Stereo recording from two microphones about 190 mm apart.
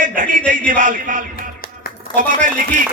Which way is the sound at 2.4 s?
45° right (ahead or behind).